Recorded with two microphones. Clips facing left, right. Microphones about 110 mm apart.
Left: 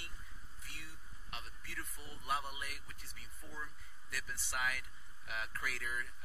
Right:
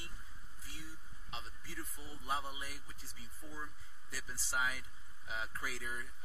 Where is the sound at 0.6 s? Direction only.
60° left (ahead or behind).